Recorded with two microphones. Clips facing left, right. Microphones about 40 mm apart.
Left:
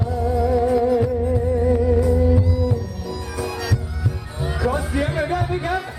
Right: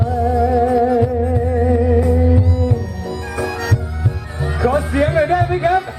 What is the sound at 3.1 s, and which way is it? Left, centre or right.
Music, right.